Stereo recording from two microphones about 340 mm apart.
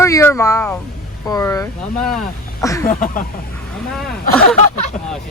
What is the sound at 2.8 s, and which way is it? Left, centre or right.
Speech, left.